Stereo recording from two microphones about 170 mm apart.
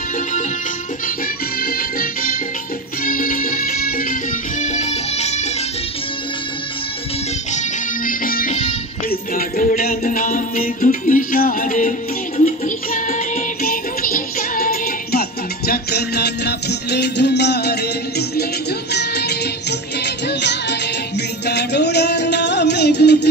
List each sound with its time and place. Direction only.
1.6 s music: 60° left (ahead or behind); by 5.5 s 40° left (ahead or behind)
7.5 s music: 55° left (ahead or behind); by 19.3 s 75° left (ahead or behind)
20.2 s music: 90° left
21.5 s music: 80° left